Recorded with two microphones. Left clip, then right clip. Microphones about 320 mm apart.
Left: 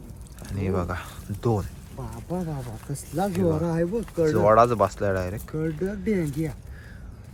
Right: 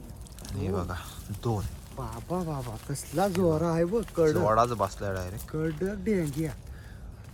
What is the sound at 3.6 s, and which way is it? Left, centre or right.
Speech, centre.